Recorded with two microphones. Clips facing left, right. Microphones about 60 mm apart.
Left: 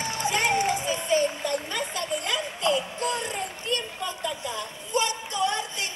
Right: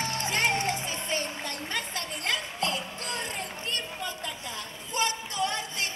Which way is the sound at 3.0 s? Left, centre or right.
Left.